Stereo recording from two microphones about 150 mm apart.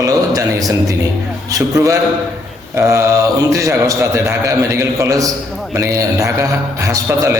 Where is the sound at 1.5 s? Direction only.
20° right (ahead or behind).